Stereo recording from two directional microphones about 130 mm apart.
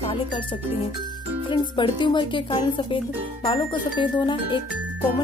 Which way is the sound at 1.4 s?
40° left (ahead or behind).